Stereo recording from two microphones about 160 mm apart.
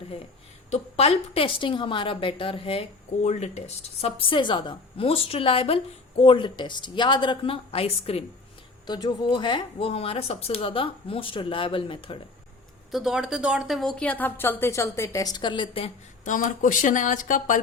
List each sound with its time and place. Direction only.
0.7 s a woman's voice: 40° left (ahead or behind)
3.2 s speech: 45° left (ahead or behind)
4.0 s a woman's voice: 30° left (ahead or behind)
8.9 s a woman's voice: 25° left (ahead or behind)
12.9 s a woman's voice: centre (ahead or behind); by 15.9 s 35° left (ahead or behind)
16.2 s speech: 50° left (ahead or behind)